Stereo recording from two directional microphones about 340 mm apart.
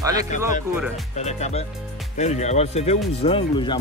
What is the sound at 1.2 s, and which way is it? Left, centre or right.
Speech, centre.